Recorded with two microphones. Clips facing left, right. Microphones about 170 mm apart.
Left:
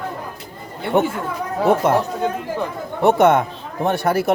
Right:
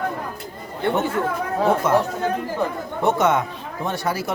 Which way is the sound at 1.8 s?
60° left (ahead or behind).